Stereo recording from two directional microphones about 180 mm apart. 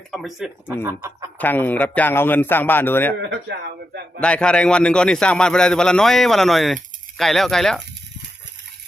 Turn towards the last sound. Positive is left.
turn(degrees=0)  # may be behind; listen again after turning